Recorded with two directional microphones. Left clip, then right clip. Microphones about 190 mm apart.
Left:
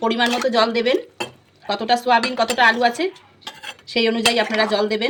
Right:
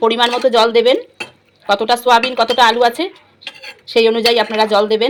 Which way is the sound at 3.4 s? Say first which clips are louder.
Right 3 dB; 25° right (ahead or behind).